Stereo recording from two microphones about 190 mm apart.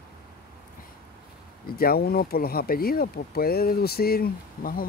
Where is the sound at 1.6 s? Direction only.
50° left (ahead or behind).